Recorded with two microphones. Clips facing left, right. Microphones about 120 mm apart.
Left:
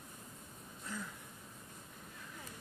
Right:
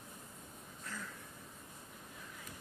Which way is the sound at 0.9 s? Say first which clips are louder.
Left 3 dB; 15° left (ahead or behind).